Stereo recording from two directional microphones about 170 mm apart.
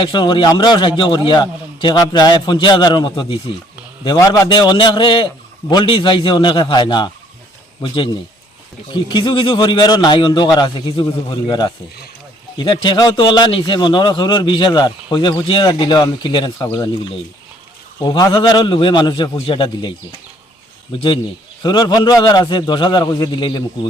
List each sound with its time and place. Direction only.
0.0 s a man's voice: 30° left (ahead or behind)
20.9 s a man's voice: 30° left (ahead or behind)